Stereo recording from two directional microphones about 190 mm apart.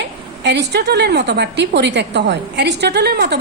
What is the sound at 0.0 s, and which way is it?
A woman's voice, 65° right (ahead or behind).